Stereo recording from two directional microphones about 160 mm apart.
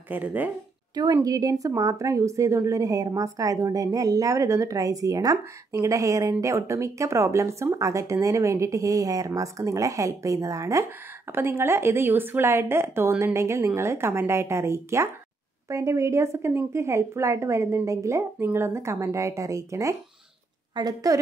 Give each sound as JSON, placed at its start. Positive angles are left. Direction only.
{"t": 0.1, "sound": "a woman's voice", "side_deg": -10}
{"t": 0.9, "sound": "a woman's voice", "side_deg": -25}